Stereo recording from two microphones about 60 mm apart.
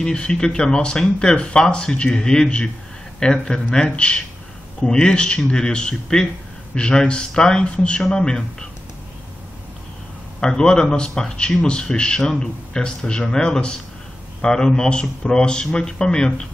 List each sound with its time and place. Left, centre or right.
0.0 s speech: centre
10.4 s speech: centre